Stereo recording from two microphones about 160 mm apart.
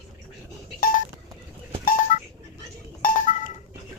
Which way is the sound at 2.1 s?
55° left (ahead or behind).